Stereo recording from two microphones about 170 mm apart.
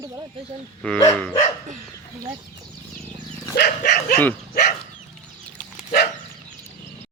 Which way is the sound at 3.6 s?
75° left (ahead or behind).